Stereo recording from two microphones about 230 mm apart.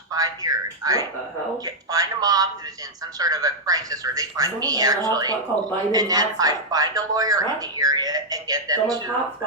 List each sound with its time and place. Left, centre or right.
0.1 s a woman's voice: centre